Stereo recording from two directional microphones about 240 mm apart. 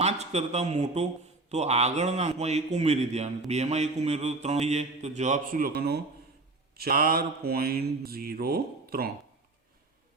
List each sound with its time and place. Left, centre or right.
0.0 s speech: right
1.5 s mantra: right